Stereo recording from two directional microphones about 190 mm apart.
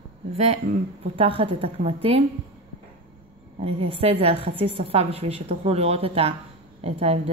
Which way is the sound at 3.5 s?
30° right (ahead or behind).